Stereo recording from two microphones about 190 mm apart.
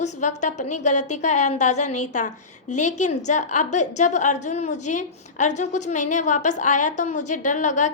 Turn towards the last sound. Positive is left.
turn(degrees=40)  # may be behind; listen again after turning